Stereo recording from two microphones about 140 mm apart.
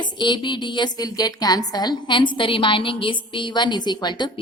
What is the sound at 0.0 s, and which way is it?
A woman's voice, 35° left (ahead or behind).